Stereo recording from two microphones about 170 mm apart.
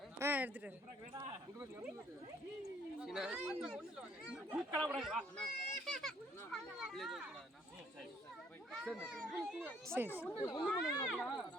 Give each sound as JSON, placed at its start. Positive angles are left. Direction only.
{"t": 0.2, "sound": "a sound", "side_deg": -10}
{"t": 1.1, "sound": "speech", "side_deg": -15}
{"t": 3.0, "sound": "speech", "side_deg": -5}
{"t": 4.8, "sound": "a child's voice", "side_deg": 0}
{"t": 9.1, "sound": "speech", "side_deg": -5}
{"t": 10.3, "sound": "speech", "side_deg": 20}
{"t": 10.6, "sound": "speech", "side_deg": 0}